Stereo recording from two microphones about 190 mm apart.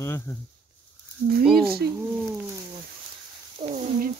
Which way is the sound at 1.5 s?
55° right (ahead or behind).